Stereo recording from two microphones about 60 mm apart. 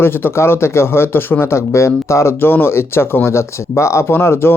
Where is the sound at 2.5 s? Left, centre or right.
Left.